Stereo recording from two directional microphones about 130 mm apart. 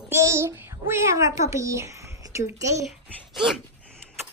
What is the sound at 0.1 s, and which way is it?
Child singing, 20° right (ahead or behind).